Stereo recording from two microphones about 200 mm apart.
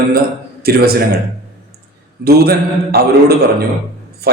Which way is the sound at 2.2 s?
50° right (ahead or behind).